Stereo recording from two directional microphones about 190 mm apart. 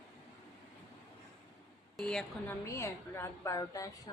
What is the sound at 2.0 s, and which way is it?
A woman's voice, 5° left (ahead or behind).